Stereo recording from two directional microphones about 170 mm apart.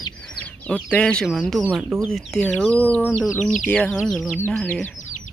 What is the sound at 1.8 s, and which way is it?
Speech, 10° right (ahead or behind).